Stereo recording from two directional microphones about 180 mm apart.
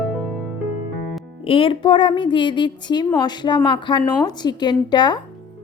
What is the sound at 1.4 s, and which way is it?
A woman's voice, 30° left (ahead or behind).